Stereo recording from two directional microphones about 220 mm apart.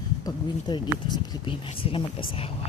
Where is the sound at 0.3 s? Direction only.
20° left (ahead or behind).